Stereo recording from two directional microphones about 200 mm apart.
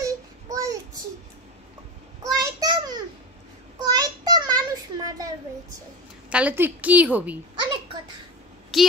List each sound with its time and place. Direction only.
0.0 s child singing: 15° right (ahead or behind)
2.2 s child singing: 20° right (ahead or behind)
3.7 s a sound: 20° right (ahead or behind)
6.3 s a woman's voice: 10° right (ahead or behind)
8.7 s speech: centre (ahead or behind)